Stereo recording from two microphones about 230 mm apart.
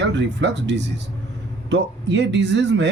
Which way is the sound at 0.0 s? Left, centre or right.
Right.